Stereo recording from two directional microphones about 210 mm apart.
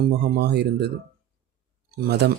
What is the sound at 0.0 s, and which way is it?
Speech, 50° right (ahead or behind).